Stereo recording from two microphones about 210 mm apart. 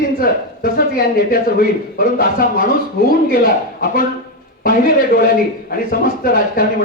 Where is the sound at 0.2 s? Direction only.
45° left (ahead or behind).